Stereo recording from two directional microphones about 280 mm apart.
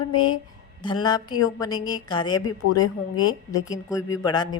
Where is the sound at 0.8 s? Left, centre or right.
Centre.